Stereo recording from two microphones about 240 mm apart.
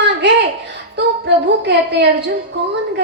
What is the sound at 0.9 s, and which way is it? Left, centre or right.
A woman's voice, right.